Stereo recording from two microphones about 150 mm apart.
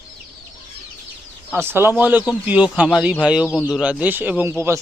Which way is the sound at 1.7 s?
15° right (ahead or behind).